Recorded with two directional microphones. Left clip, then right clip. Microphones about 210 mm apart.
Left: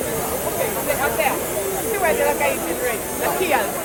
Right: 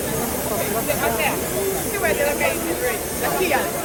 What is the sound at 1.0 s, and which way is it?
Hiss, 45° left (ahead or behind).